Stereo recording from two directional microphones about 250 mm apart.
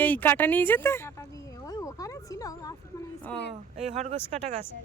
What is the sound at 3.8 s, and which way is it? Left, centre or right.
Speech, right.